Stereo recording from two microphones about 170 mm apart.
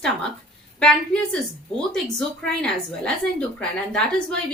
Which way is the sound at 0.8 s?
5° left (ahead or behind).